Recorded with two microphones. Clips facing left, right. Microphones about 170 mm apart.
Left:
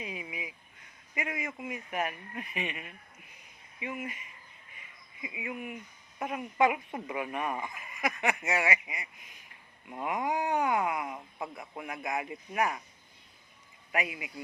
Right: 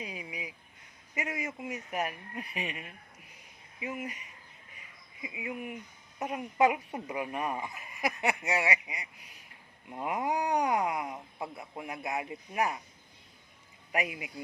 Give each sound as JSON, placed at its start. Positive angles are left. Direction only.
{"t": 0.0, "sound": "a sound", "side_deg": -35}
{"t": 1.1, "sound": "a man's voice", "side_deg": -25}
{"t": 1.7, "sound": "speech", "side_deg": -40}
{"t": 5.4, "sound": "a man's voice", "side_deg": -25}
{"t": 10.2, "sound": "a man's voice", "side_deg": -20}
{"t": 10.5, "sound": "speech", "side_deg": -35}
{"t": 13.9, "sound": "speech", "side_deg": -45}